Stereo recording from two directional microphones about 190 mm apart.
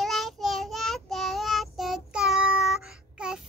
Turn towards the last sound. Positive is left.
turn(degrees=-5)  # may be behind; listen again after turning